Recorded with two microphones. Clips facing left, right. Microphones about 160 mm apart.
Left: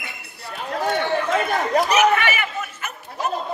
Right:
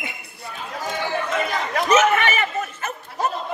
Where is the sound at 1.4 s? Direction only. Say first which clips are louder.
Left 5 dB; 50° left (ahead or behind).